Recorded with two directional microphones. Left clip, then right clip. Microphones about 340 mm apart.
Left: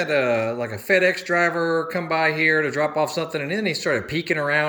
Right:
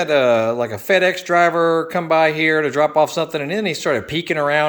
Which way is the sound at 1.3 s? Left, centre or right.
Centre.